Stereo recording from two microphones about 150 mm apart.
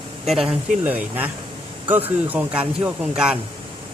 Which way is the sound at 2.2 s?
10° right (ahead or behind).